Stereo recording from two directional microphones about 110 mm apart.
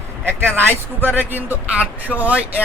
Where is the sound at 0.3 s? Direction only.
20° right (ahead or behind).